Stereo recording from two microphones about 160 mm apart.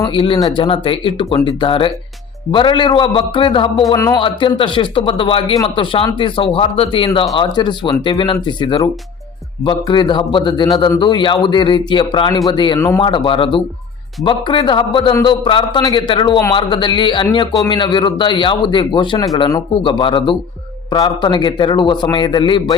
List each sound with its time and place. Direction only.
0.0 s speech: 35° left (ahead or behind)
3.9 s a man's voice: 20° left (ahead or behind)
4.2 s a man's voice: 30° left (ahead or behind)